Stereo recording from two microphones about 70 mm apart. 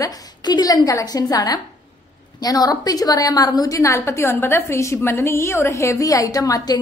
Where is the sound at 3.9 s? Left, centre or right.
Left.